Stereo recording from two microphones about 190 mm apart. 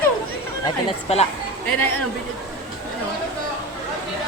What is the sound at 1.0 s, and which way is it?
Speech, 35° left (ahead or behind).